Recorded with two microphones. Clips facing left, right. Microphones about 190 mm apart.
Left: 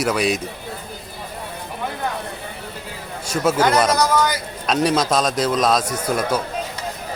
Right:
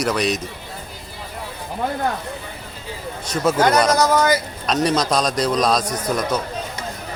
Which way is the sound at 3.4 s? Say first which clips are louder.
Right 1 dB; 5° left (ahead or behind).